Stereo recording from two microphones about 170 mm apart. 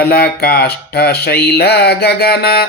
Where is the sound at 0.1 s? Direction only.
65° left (ahead or behind).